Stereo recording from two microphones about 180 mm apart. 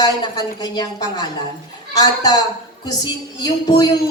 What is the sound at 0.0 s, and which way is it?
A woman's voice, 20° left (ahead or behind).